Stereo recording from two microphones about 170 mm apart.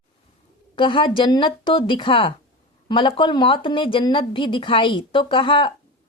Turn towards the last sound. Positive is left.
turn(degrees=30)  # may be behind; listen again after turning